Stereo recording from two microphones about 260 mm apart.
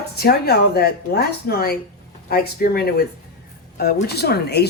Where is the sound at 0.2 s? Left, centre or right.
Left.